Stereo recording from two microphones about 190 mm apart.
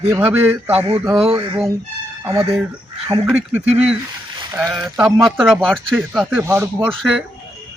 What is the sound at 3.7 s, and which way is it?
Speech, 35° right (ahead or behind).